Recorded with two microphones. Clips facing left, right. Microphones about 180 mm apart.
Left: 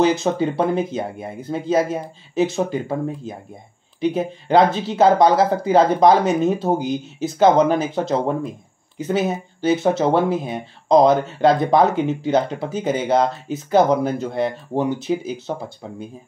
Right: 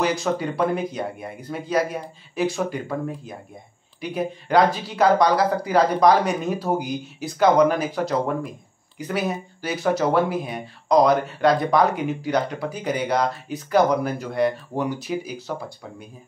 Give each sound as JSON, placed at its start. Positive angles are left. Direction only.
{"t": 0.0, "sound": "speech", "side_deg": 25}